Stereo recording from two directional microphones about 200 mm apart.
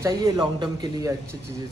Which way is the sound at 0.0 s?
20° right (ahead or behind).